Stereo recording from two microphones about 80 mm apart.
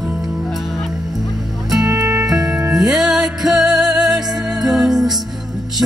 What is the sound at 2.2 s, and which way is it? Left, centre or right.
Music, right.